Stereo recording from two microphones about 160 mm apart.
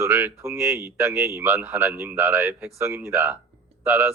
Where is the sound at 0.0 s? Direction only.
15° right (ahead or behind).